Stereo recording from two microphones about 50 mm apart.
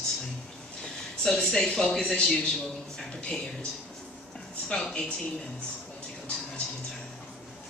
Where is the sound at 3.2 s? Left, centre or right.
Left.